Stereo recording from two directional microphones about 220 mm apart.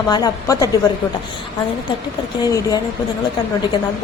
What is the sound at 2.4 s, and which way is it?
Speech, 15° left (ahead or behind).